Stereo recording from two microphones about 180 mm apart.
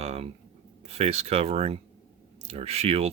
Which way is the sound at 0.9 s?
35° right (ahead or behind).